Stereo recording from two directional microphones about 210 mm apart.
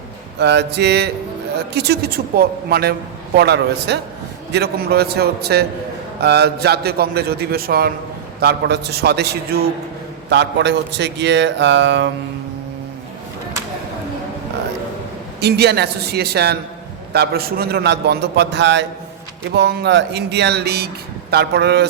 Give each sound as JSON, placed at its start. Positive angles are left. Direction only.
{"t": 0.3, "sound": "a man's voice", "side_deg": -55}
{"t": 15.4, "sound": "speech", "side_deg": -50}